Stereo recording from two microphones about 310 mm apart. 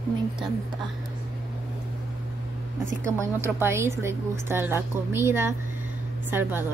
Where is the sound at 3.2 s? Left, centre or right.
Centre.